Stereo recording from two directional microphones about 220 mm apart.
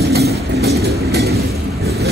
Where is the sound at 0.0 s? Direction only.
45° right (ahead or behind).